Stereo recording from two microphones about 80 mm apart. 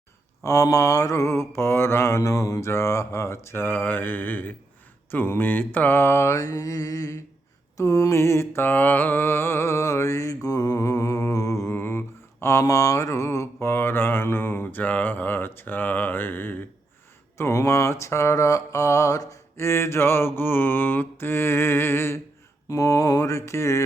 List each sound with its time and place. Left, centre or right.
0.4 s mantra: left
17.3 s mantra: left
22.7 s mantra: left